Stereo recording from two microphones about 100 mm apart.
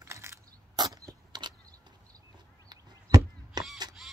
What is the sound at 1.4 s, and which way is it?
Vehicle, 50° right (ahead or behind).